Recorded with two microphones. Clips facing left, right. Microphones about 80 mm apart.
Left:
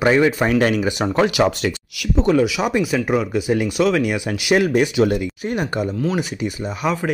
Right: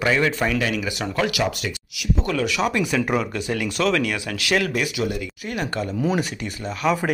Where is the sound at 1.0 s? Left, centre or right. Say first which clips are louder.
Left 6 dB; left.